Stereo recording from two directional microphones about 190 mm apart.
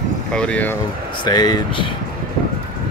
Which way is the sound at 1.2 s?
20° left (ahead or behind).